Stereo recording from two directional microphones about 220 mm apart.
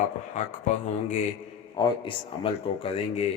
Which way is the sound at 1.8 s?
25° left (ahead or behind).